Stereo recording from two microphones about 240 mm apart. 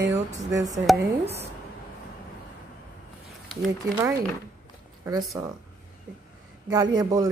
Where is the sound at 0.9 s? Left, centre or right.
Centre.